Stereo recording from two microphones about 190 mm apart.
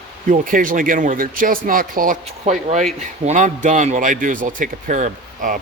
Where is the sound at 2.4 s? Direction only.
35° right (ahead or behind).